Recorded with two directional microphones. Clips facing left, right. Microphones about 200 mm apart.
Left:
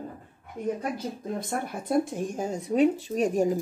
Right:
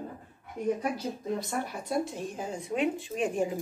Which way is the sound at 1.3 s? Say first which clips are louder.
Left 2 dB; 50° left (ahead or behind).